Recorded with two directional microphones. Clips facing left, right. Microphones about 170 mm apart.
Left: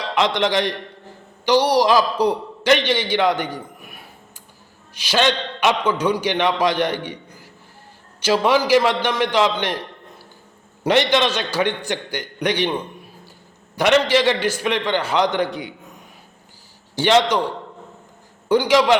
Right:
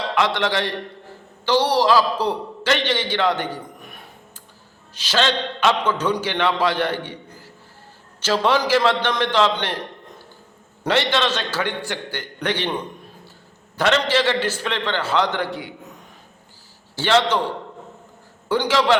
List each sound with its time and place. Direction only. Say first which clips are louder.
0.2 s a man's voice: left 3 dB; 20° left (ahead or behind)
10.8 s a man's voice: left 3 dB; 15° left (ahead or behind)
16.9 s a man's voice: left 2 dB; 15° left (ahead or behind)
18.4 s a man's voice: left 3 dB; 15° left (ahead or behind)